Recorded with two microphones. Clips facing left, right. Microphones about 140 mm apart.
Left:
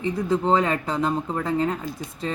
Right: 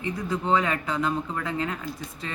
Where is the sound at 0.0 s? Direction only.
30° left (ahead or behind).